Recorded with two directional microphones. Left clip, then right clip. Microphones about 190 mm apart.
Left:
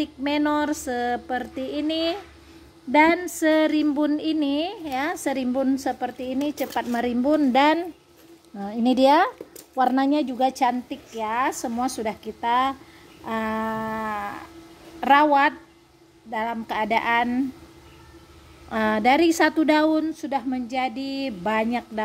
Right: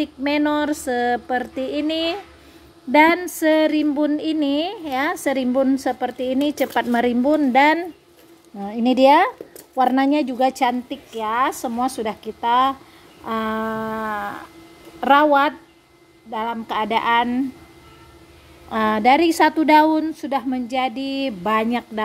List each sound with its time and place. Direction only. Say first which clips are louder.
0.0 s a woman's voice: right 3 dB; 10° right (ahead or behind)
7.2 s a woman's voice: right 2 dB; centre (ahead or behind)
16.3 s a woman's voice: right 2 dB; 5° right (ahead or behind)
18.7 s a woman's voice: right 4 dB; 5° right (ahead or behind)